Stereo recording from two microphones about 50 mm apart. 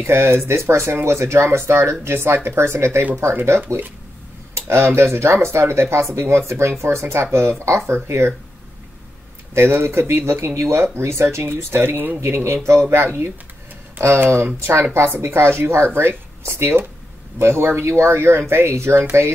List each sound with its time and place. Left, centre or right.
0.0 s speech: right
3.6 s speech: right
4.6 s speech: right
9.5 s speech: right
12.2 s speech: right
18.9 s speech: right